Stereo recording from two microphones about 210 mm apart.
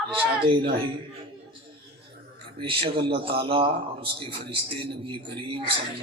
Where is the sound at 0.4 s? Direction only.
25° right (ahead or behind).